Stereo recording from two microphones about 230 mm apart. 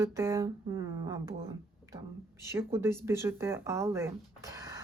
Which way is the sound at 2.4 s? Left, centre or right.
Centre.